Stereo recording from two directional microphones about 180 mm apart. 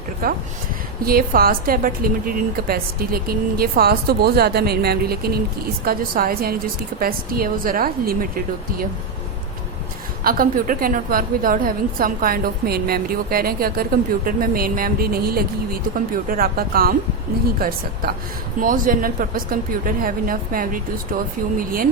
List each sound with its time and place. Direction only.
0.2 s a woman's voice: 55° right (ahead or behind)
10.2 s a woman's voice: 50° right (ahead or behind)